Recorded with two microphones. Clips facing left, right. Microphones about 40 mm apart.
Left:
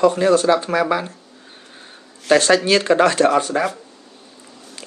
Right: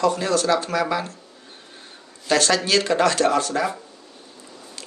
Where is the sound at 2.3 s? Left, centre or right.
Left.